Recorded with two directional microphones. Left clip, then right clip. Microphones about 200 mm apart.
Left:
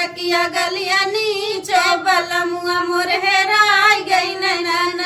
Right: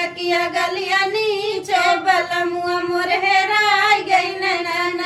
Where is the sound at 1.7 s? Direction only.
15° left (ahead or behind).